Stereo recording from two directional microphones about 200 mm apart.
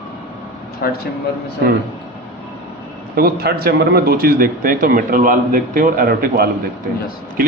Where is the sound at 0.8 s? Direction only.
50° left (ahead or behind).